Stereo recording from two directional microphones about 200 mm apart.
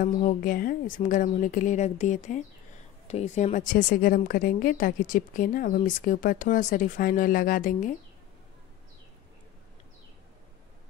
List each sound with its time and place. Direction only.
0.0 s a woman's voice: 40° left (ahead or behind)